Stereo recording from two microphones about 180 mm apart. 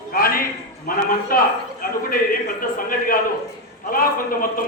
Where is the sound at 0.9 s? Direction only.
55° left (ahead or behind).